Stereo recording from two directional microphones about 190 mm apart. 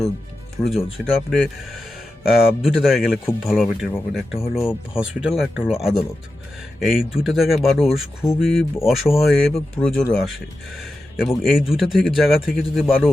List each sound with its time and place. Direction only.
0.6 s speech: centre (ahead or behind)
8.2 s speech: 15° left (ahead or behind)
8.5 s speech: centre (ahead or behind)